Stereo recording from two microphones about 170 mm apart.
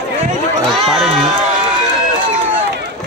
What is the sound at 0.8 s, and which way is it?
Speech, centre (ahead or behind).